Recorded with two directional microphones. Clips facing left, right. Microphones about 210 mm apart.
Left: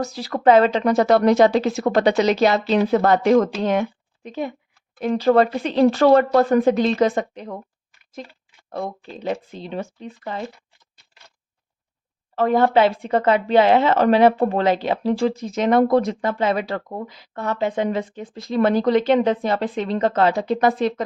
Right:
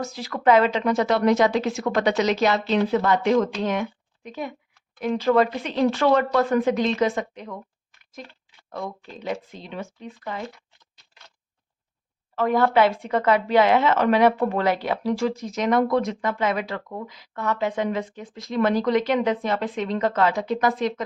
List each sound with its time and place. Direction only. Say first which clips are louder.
0.0 s speech: left 4 dB; 35° left (ahead or behind)
3.6 s speech: left 4 dB; 30° left (ahead or behind)
8.7 s speech: left 4 dB; 30° left (ahead or behind)
12.4 s speech: left 3 dB; 30° left (ahead or behind)